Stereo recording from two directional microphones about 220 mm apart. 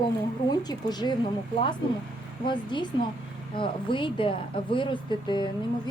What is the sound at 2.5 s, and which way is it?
Speech, 20° left (ahead or behind).